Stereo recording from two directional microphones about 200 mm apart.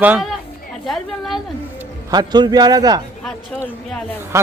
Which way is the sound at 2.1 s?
20° right (ahead or behind).